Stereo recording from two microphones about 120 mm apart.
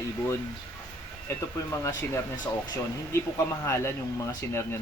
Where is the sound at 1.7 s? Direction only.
25° left (ahead or behind).